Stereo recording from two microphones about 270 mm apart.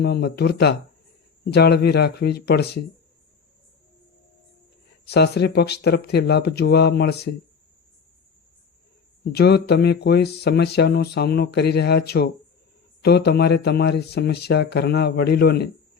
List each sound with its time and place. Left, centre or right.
0.0 s speech: left
5.0 s speech: left
9.3 s speech: left